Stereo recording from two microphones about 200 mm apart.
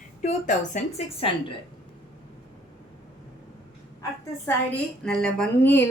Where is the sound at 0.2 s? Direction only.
40° left (ahead or behind).